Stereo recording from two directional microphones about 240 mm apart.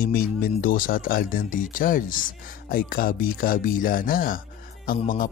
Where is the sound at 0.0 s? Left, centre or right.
Left.